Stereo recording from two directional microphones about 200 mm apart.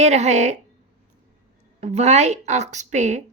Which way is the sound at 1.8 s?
35° right (ahead or behind).